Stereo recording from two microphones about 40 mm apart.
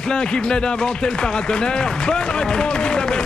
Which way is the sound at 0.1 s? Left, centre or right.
Left.